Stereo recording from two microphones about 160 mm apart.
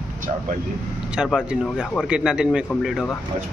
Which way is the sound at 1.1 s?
5° right (ahead or behind).